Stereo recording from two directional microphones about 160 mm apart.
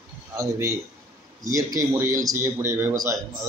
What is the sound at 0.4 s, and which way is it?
A man's voice, 20° right (ahead or behind).